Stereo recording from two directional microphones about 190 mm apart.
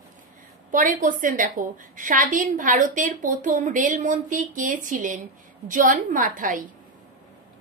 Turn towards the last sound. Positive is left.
turn(degrees=-45)  # may be behind; listen again after turning